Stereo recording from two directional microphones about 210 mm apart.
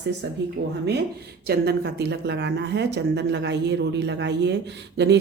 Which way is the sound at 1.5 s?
50° right (ahead or behind).